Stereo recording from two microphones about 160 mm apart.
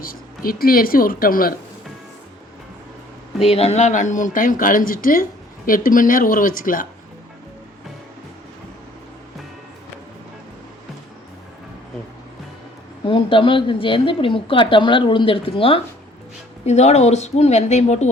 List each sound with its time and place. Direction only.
0.0 s speech: 65° left (ahead or behind)
3.4 s speech: 40° left (ahead or behind); by 6.8 s 60° left (ahead or behind)
13.1 s a woman's voice: 30° left (ahead or behind)